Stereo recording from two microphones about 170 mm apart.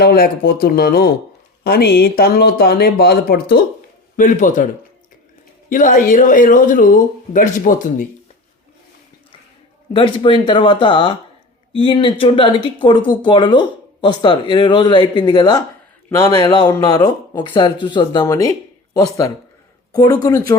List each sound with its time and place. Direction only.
0.0 s speech: 60° left (ahead or behind)
4.2 s speech: 50° left (ahead or behind)
9.9 s speech: 30° left (ahead or behind)